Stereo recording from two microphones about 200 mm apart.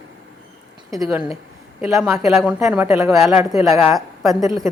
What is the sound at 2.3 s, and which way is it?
Speech, centre (ahead or behind).